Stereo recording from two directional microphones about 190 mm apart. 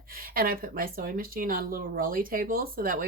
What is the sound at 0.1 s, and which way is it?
A woman's voice, 50° right (ahead or behind).